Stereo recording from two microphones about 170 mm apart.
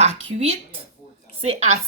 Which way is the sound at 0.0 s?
40° right (ahead or behind).